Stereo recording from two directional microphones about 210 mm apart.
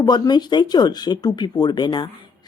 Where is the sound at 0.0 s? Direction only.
20° left (ahead or behind).